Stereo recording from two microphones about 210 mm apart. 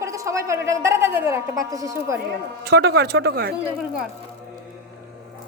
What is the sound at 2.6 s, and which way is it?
Speech, 50° right (ahead or behind).